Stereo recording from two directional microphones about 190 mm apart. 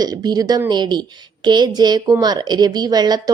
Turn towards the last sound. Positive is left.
turn(degrees=-20)  # may be behind; listen again after turning